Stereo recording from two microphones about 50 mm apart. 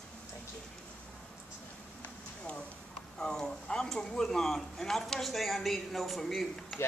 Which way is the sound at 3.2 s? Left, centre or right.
Centre.